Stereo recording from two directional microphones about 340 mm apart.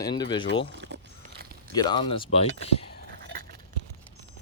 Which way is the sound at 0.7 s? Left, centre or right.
Right.